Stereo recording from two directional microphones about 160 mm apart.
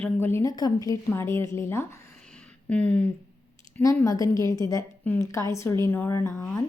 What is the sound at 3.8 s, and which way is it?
A woman's voice, 20° left (ahead or behind).